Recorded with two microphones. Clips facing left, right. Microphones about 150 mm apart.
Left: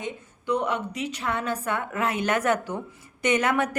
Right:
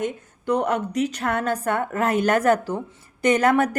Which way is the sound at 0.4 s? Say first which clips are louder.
Right 4 dB; 40° right (ahead or behind).